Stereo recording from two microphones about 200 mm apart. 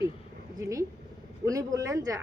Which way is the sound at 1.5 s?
15° right (ahead or behind).